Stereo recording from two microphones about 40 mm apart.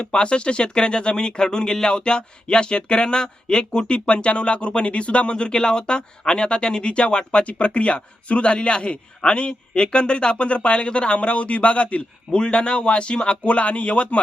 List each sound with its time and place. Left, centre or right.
0.0 s speech: left
12.3 s speech: left
13.4 s speech: left